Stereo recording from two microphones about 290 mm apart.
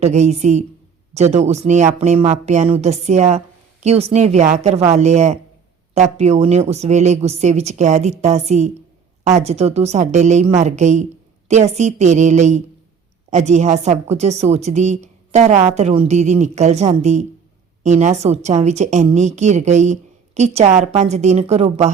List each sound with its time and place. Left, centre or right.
0.0 s a woman's voice: right